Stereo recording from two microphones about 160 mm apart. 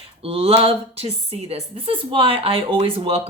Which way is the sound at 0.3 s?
35° right (ahead or behind).